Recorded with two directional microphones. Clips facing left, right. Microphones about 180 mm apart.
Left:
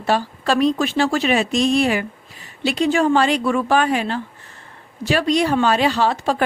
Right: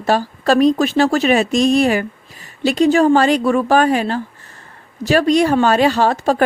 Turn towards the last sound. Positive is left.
turn(degrees=-45)  # may be behind; listen again after turning